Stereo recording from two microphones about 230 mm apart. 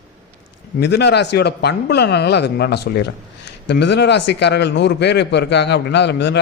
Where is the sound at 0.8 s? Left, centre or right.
Left.